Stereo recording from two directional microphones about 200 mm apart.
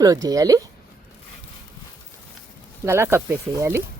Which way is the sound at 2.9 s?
10° right (ahead or behind).